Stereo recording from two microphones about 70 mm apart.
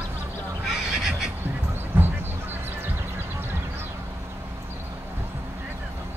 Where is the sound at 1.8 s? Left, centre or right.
Right.